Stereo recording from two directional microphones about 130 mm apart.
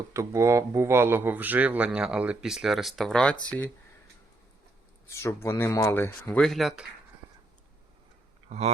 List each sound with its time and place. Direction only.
0.1 s speech: 25° right (ahead or behind); by 3.7 s 10° left (ahead or behind)
5.0 s speech: 20° left (ahead or behind)
6.4 s speech: centre (ahead or behind)
8.4 s speech: 55° right (ahead or behind)